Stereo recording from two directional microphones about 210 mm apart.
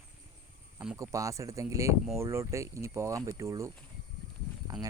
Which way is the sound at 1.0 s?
15° right (ahead or behind).